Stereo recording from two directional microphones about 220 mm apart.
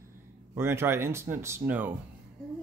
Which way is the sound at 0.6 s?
10° right (ahead or behind).